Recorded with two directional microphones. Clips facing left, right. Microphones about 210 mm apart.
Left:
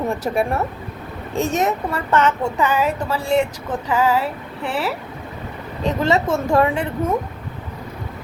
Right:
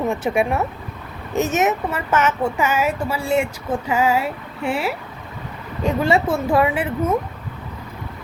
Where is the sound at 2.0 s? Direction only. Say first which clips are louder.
Left 1 dB; 5° right (ahead or behind).